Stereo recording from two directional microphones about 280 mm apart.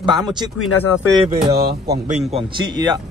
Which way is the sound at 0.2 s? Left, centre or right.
Centre.